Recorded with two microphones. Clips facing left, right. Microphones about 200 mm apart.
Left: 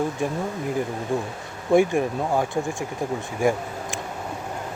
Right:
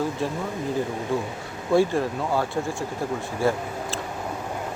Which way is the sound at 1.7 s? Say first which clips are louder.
Left 2 dB; 15° left (ahead or behind).